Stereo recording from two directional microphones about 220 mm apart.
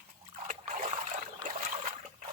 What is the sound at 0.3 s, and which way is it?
Splash, 30° right (ahead or behind).